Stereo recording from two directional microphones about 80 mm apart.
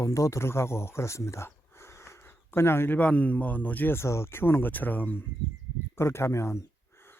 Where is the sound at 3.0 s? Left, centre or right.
Centre.